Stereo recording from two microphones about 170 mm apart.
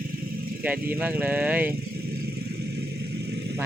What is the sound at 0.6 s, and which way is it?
Speech, 10° right (ahead or behind).